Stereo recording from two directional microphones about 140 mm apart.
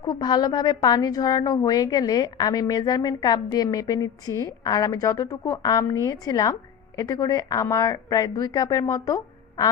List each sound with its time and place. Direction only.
0.0 s a woman's voice: 30° left (ahead or behind)